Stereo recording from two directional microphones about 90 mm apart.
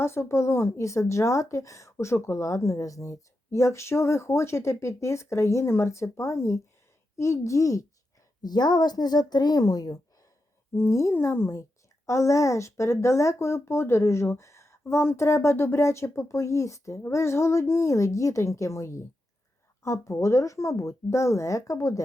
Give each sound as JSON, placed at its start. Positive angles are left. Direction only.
{"t": 0.0, "sound": "speech", "side_deg": 30}
{"t": 8.4, "sound": "speech", "side_deg": 50}
{"t": 10.8, "sound": "speech", "side_deg": 30}